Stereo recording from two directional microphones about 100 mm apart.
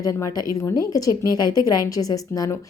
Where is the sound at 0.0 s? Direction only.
35° left (ahead or behind).